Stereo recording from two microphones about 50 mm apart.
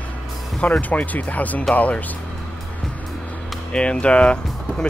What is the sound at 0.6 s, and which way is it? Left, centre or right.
Speech, left.